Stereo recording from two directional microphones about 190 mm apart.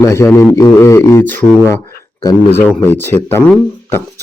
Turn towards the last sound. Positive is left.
turn(degrees=10)  # may be behind; listen again after turning